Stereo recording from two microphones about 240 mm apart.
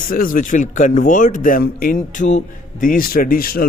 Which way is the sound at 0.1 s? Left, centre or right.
Left.